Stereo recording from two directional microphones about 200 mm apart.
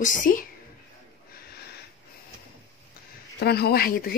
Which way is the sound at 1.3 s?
50° left (ahead or behind).